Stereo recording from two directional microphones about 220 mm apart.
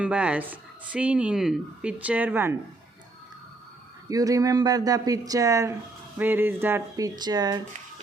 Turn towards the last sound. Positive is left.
turn(degrees=-20)  # may be behind; listen again after turning